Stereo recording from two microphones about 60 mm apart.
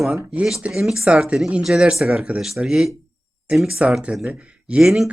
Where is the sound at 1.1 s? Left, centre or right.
Centre.